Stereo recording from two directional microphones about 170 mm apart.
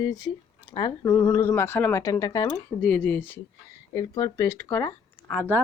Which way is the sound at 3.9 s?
20° left (ahead or behind).